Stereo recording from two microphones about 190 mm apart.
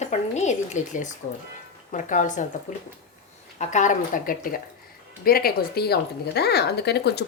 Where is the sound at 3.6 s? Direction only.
40° left (ahead or behind); by 7.3 s 60° left (ahead or behind).